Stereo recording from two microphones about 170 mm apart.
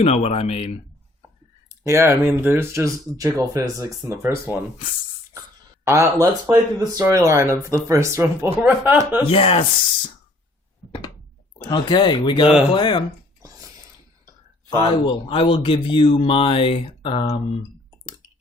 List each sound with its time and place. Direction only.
0.0 s speech: 35° left (ahead or behind)
1.7 s speech: 15° right (ahead or behind)
5.8 s speech: 20° right (ahead or behind)
9.3 s speech: 35° left (ahead or behind)
11.6 s speech: 25° left (ahead or behind)
13.4 s a sound: 20° right (ahead or behind)
14.9 s speech: 30° left (ahead or behind)